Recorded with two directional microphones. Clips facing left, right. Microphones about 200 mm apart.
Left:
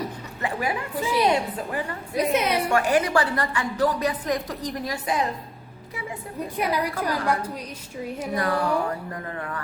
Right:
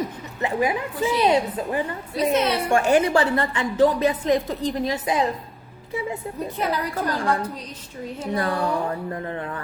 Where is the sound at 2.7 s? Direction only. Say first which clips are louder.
Right 4 dB; 25° right (ahead or behind).